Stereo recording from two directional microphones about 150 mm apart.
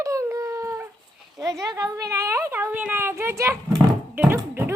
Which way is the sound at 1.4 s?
20° right (ahead or behind).